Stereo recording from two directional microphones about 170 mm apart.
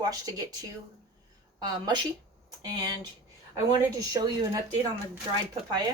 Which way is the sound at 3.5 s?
20° right (ahead or behind).